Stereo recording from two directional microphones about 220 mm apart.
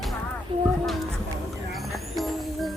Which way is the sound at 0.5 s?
25° right (ahead or behind).